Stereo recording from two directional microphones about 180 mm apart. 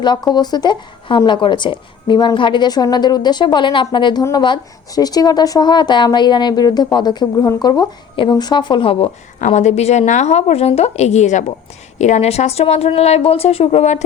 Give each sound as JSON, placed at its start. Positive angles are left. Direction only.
{"t": 0.0, "sound": "speech", "side_deg": 25}
{"t": 9.4, "sound": "speech", "side_deg": 40}